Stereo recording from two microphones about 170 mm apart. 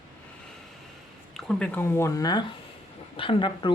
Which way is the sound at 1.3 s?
5° left (ahead or behind).